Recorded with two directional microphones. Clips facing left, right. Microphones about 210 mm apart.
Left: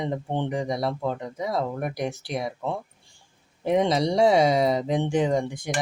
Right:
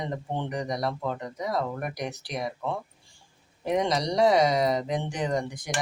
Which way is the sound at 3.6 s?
25° left (ahead or behind).